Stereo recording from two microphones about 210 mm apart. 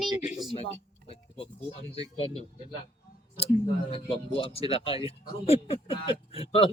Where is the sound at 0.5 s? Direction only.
30° left (ahead or behind).